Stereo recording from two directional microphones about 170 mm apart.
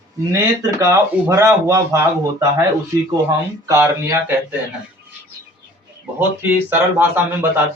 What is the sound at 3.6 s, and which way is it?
Speech, 20° right (ahead or behind).